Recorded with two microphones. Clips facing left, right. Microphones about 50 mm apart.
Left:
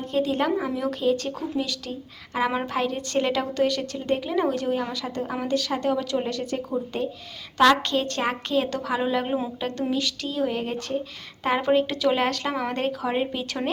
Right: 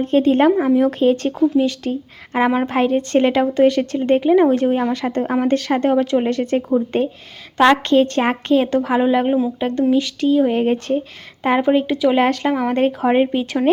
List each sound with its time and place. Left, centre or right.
0.0 s a woman's voice: right
11.4 s a woman's voice: centre
12.7 s a woman's voice: right